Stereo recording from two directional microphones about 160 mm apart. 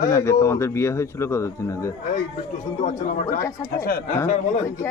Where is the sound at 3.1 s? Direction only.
55° left (ahead or behind).